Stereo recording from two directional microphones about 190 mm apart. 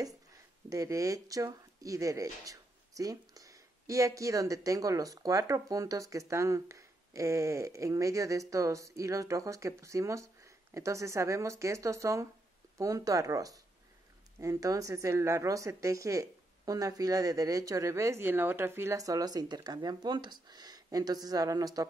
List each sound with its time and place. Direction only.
0.7 s speech: 15° right (ahead or behind)